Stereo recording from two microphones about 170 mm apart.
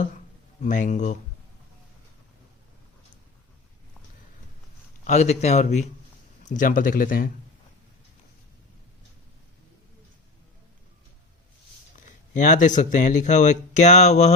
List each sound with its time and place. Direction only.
0.6 s speech: 45° left (ahead or behind)
5.0 s speech: 40° left (ahead or behind)
12.3 s speech: 50° left (ahead or behind)